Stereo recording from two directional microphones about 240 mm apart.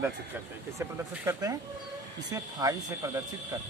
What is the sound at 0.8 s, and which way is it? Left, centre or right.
Speech, centre.